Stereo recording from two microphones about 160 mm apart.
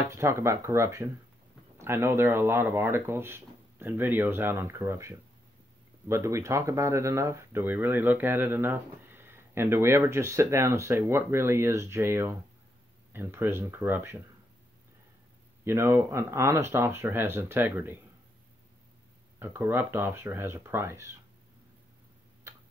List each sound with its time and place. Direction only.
0.1 s speech: 15° right (ahead or behind)
15.6 s speech: 15° right (ahead or behind)
19.4 s speech: 15° right (ahead or behind)
22.5 s tick-tock: 15° right (ahead or behind)